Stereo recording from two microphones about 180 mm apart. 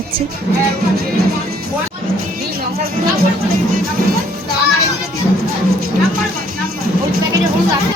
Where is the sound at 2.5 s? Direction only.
60° right (ahead or behind).